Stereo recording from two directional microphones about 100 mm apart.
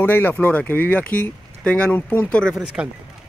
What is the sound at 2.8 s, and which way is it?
Speech, 10° right (ahead or behind).